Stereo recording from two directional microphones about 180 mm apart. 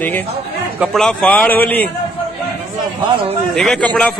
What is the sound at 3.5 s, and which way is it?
Speech, centre (ahead or behind).